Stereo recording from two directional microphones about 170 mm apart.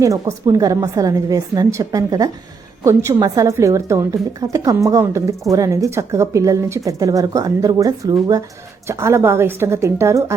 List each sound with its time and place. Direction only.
0.0 s a woman's voice: 20° right (ahead or behind)